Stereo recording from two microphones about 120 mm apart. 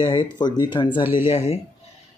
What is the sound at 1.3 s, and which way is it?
Speech, 65° left (ahead or behind).